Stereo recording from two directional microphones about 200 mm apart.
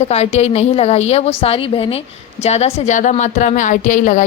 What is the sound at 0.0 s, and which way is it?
A woman's voice, 30° left (ahead or behind).